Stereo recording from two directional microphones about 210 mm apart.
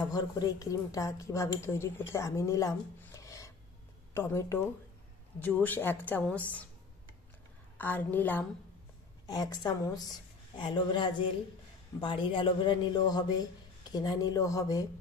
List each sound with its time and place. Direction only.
0.0 s a woman's voice: 20° left (ahead or behind)
7.7 s a woman's voice: 10° left (ahead or behind)